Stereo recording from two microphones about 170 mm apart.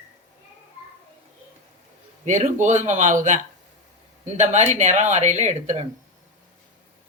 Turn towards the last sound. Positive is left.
turn(degrees=-45)  # may be behind; listen again after turning